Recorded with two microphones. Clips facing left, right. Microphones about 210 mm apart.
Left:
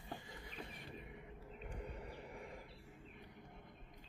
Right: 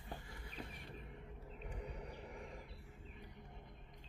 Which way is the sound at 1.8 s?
Centre (ahead or behind).